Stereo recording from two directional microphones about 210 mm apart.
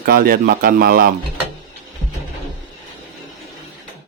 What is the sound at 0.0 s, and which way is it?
Speech, 45° right (ahead or behind).